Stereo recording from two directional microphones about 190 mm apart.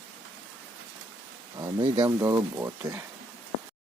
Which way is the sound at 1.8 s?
30° right (ahead or behind).